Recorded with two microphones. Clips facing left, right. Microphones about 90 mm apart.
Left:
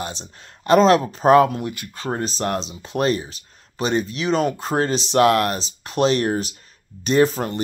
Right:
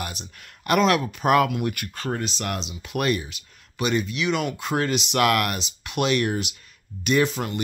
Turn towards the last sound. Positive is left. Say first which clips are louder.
# left 4 dB
turn(degrees=35)  # may be behind; listen again after turning